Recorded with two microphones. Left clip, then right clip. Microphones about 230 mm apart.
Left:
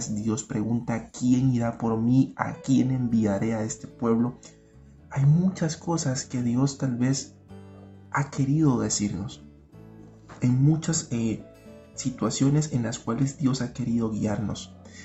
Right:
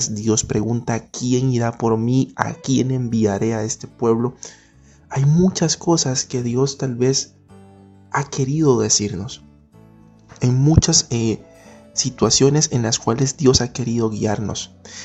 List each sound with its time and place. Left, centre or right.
0.0 s speech: right
10.4 s speech: right